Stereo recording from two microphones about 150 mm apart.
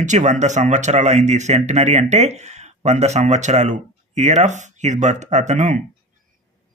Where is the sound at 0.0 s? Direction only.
55° right (ahead or behind).